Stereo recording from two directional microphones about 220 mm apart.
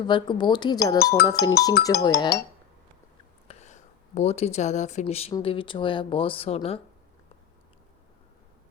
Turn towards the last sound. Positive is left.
turn(degrees=25)  # may be behind; listen again after turning